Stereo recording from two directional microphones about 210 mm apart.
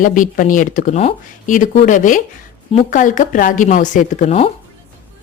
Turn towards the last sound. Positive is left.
turn(degrees=30)  # may be behind; listen again after turning